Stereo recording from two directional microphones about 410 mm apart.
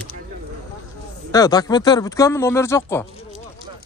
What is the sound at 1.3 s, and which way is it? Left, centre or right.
Speech, centre.